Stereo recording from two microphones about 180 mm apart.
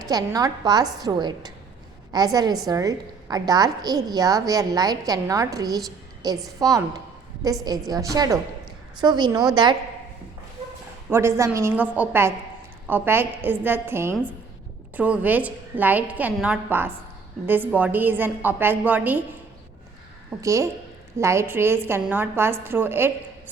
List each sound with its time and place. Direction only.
0.1 s a woman's voice: 20° right (ahead or behind)
11.1 s a woman's voice: 15° right (ahead or behind)
20.4 s a woman's voice: 15° right (ahead or behind)